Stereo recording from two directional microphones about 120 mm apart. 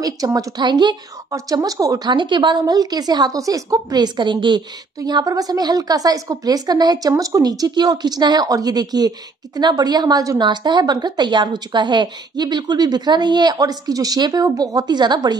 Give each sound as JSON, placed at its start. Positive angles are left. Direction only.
{"t": 0.0, "sound": "speech", "side_deg": -30}